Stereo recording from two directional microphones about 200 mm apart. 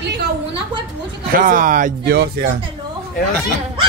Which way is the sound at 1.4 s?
40° right (ahead or behind).